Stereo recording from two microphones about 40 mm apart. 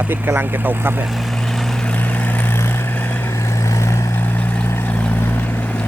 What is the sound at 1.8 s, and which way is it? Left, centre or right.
Vehicle, left.